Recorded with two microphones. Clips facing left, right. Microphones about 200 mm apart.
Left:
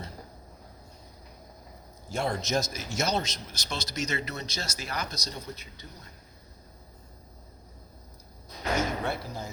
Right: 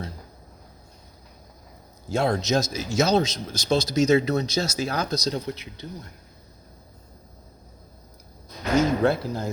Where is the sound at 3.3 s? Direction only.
45° right (ahead or behind).